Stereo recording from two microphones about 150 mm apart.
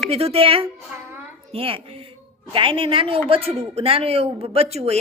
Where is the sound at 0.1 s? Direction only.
40° right (ahead or behind).